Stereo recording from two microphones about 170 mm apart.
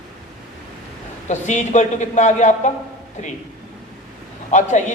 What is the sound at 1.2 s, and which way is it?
A man's voice, 45° left (ahead or behind).